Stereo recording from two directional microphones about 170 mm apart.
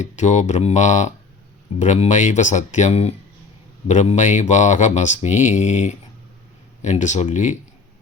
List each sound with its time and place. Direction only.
0.0 s speech: 45° left (ahead or behind)